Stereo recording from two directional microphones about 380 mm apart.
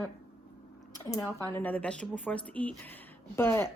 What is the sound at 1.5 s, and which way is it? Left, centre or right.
A woman's voice, centre.